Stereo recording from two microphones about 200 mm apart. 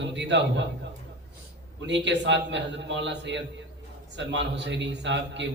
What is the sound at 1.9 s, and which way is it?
A man's voice, 60° right (ahead or behind).